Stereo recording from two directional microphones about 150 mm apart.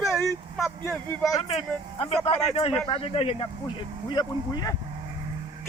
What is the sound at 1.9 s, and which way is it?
Speech, 40° left (ahead or behind).